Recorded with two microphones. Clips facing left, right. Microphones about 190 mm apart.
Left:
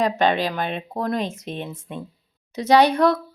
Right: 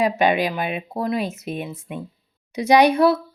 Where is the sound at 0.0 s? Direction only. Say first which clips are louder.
Right 1 dB; 10° right (ahead or behind).